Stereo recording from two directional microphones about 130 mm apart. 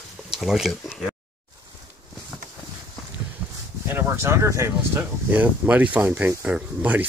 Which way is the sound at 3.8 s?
20° right (ahead or behind).